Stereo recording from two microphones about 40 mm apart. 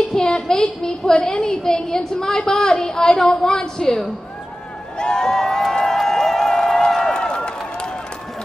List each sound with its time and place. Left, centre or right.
0.1 s a woman's voice: centre
5.9 s run: centre